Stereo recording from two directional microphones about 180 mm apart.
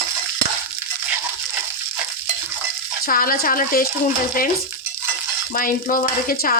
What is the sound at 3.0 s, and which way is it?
Stir, 55° left (ahead or behind).